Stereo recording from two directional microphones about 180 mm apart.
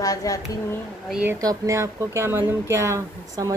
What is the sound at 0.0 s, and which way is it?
Speech, 20° left (ahead or behind).